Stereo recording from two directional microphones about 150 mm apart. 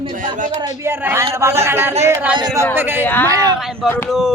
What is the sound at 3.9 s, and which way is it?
Speech, 15° left (ahead or behind).